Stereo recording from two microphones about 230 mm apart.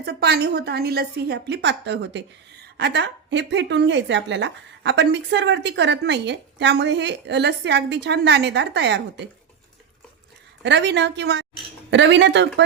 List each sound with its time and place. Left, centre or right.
0.0 s a woman's voice: right
10.6 s a woman's voice: right